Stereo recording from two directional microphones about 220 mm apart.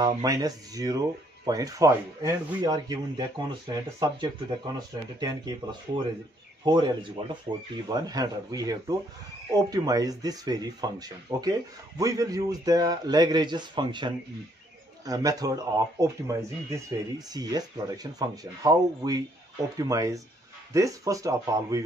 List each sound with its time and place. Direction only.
0.0 s speech: 15° right (ahead or behind)